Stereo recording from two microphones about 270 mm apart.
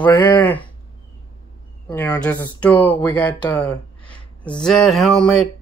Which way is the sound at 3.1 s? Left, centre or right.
Centre.